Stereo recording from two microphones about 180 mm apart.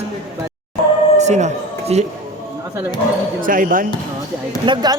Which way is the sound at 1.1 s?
40° right (ahead or behind).